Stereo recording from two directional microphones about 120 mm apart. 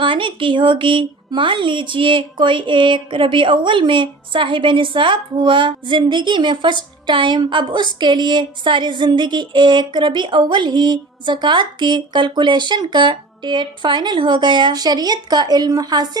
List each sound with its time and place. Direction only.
0.0 s a woman's voice: 45° right (ahead or behind)